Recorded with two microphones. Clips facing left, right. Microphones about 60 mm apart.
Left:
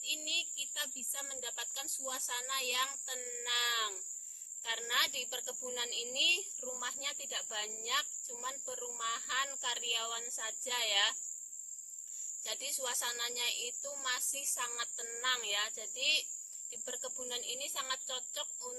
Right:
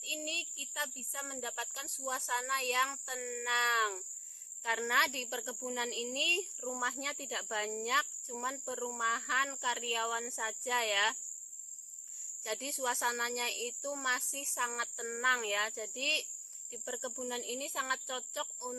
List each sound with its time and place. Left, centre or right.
0.1 s speech: right
12.5 s speech: right